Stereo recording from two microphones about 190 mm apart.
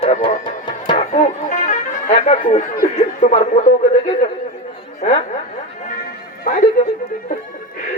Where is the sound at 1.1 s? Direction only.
40° left (ahead or behind).